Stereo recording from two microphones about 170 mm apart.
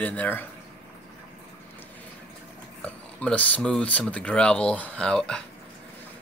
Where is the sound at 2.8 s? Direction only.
10° left (ahead or behind).